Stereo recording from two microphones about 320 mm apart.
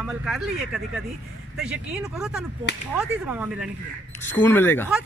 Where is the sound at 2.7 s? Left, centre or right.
Left.